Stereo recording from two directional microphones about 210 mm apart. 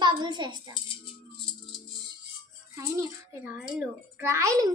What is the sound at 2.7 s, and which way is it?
A child's voice, 15° right (ahead or behind).